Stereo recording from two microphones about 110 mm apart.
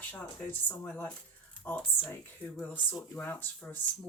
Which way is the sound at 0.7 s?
15° left (ahead or behind).